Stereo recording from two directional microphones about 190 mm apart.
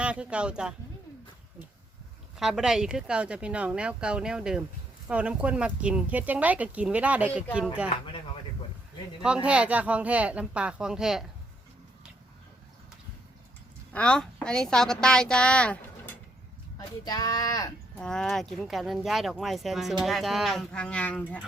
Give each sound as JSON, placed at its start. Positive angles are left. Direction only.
{"t": 0.0, "sound": "speech", "side_deg": -5}
{"t": 2.4, "sound": "speech", "side_deg": 0}
{"t": 9.2, "sound": "speech", "side_deg": -5}
{"t": 13.9, "sound": "speech", "side_deg": 5}
{"t": 17.1, "sound": "speech", "side_deg": 20}
{"t": 17.9, "sound": "speech", "side_deg": 5}